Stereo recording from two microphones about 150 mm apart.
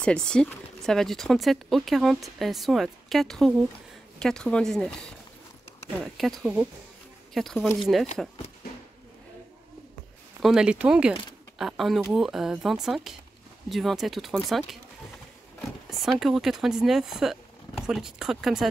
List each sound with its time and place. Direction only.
0.0 s speech: 5° left (ahead or behind)
6.1 s speech: centre (ahead or behind)
10.4 s speech: 5° right (ahead or behind)
16.0 s speech: centre (ahead or behind)